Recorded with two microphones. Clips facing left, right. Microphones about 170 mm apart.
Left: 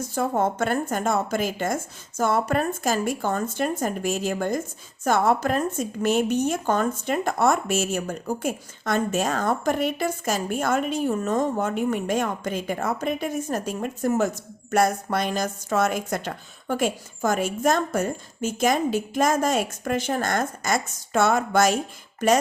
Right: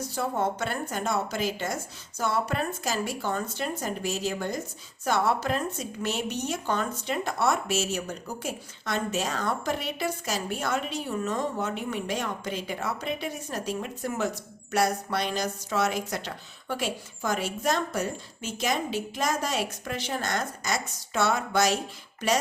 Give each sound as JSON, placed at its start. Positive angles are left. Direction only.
{"t": 0.0, "sound": "a woman's voice", "side_deg": 50}